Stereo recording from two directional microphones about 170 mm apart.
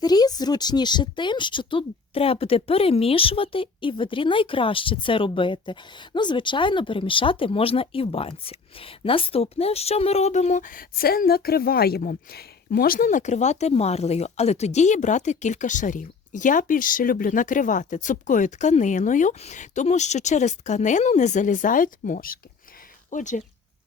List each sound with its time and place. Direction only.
0.0 s speech: 25° left (ahead or behind); by 23.4 s 45° left (ahead or behind)